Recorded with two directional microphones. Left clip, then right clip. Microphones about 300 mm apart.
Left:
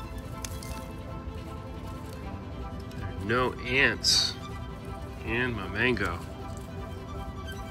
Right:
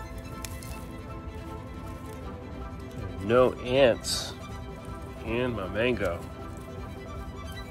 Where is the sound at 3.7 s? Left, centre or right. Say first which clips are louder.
Even; right.